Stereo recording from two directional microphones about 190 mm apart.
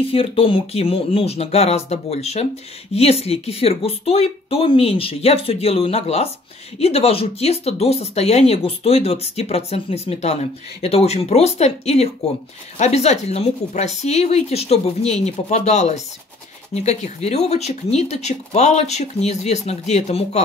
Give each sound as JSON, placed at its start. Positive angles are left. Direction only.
{"t": 0.0, "sound": "speech", "side_deg": 30}